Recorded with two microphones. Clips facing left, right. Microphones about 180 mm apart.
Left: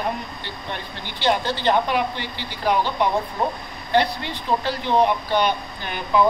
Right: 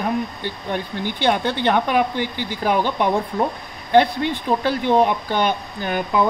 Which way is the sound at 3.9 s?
50° right (ahead or behind).